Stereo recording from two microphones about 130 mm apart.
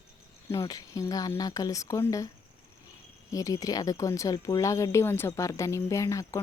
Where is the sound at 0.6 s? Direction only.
30° left (ahead or behind).